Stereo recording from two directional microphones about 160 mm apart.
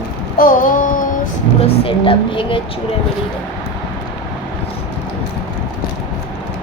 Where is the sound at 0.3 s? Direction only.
60° left (ahead or behind).